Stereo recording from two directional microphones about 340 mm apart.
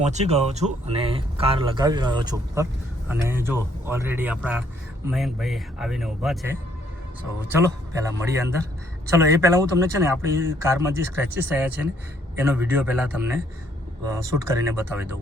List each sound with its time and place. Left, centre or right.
0.0 s a man's voice: centre
8.3 s a man's voice: centre